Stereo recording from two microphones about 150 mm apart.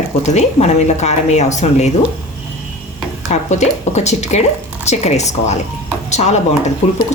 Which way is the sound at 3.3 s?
50° left (ahead or behind).